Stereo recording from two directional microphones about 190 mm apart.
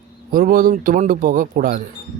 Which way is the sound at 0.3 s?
45° right (ahead or behind).